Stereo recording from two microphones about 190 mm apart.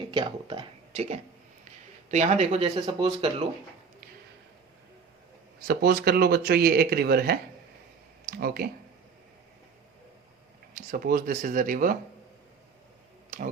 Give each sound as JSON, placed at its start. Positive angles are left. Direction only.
{"t": 0.1, "sound": "speech", "side_deg": -25}
{"t": 5.6, "sound": "speech", "side_deg": -55}
{"t": 10.8, "sound": "speech", "side_deg": -50}